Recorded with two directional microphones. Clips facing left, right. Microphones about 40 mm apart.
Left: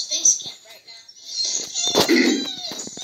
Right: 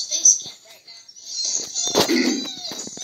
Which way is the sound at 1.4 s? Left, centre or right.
Left.